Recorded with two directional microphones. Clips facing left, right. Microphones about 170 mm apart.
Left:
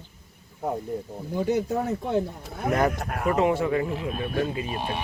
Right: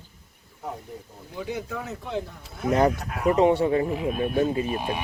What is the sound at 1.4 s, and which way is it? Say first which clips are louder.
Speech: left 7 dB; 45° left (ahead or behind).